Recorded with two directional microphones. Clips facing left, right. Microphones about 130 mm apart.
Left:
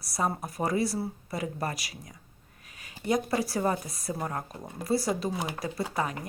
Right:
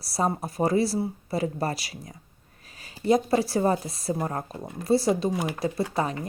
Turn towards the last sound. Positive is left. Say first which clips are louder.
# right 4 dB
turn(degrees=-25)  # may be behind; listen again after turning